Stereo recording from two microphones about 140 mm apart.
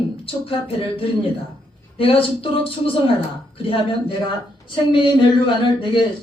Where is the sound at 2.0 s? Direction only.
40° left (ahead or behind).